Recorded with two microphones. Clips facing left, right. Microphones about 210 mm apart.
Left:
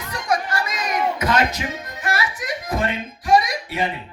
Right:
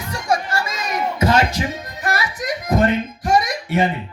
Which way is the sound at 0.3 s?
25° right (ahead or behind).